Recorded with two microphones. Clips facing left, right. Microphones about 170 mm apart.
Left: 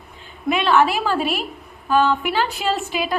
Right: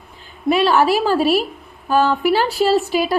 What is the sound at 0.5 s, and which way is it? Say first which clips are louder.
A woman's voice: right 3 dB; 35° right (ahead or behind).